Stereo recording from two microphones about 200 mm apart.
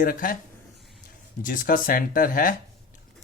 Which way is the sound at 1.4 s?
45° left (ahead or behind).